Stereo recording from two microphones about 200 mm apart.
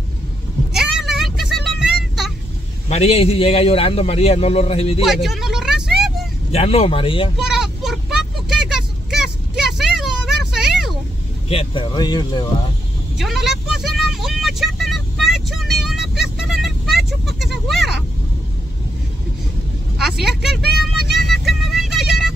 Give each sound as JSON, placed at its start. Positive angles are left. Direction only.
{"t": 0.7, "sound": "vehicle", "side_deg": 0}
{"t": 2.9, "sound": "a man's voice", "side_deg": 30}
{"t": 5.0, "sound": "vehicle", "side_deg": 0}
{"t": 6.5, "sound": "a man's voice", "side_deg": 30}
{"t": 7.3, "sound": "vehicle", "side_deg": 0}
{"t": 9.8, "sound": "a sound", "side_deg": 0}
{"t": 11.4, "sound": "a man's voice", "side_deg": 25}
{"t": 13.2, "sound": "vehicle", "side_deg": 0}
{"t": 20.0, "sound": "vehicle", "side_deg": 0}